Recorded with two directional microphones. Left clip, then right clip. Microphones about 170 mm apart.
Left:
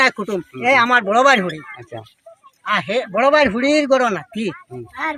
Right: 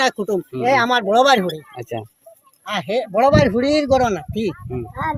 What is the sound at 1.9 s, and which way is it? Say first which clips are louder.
Speech: right 7 dB; 60° right (ahead or behind).